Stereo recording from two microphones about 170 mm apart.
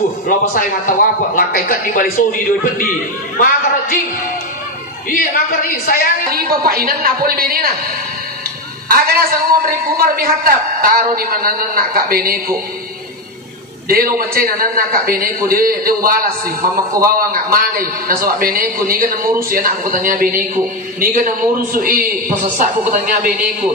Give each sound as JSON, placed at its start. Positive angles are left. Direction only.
{"t": 0.3, "sound": "a man's voice", "side_deg": 50}
{"t": 5.1, "sound": "a woman's voice", "side_deg": 55}
{"t": 6.3, "sound": "a man's voice", "side_deg": -60}
{"t": 8.8, "sound": "a man's voice", "side_deg": -60}
{"t": 13.8, "sound": "a man's voice", "side_deg": -60}